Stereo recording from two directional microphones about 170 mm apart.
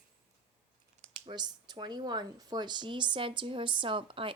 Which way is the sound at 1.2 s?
25° right (ahead or behind).